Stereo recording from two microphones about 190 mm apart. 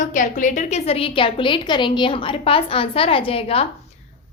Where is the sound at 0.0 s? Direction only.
40° left (ahead or behind).